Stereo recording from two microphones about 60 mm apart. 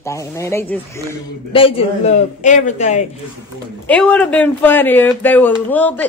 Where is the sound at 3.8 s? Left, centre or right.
Left.